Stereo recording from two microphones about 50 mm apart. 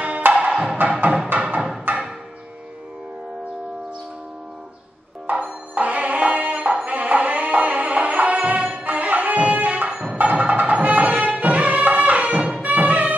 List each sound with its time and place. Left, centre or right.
0.0 s music: right
1.3 s music: right
1.9 s a sound: right
5.3 s music: right